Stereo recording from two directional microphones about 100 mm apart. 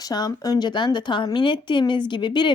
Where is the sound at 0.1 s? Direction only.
40° left (ahead or behind).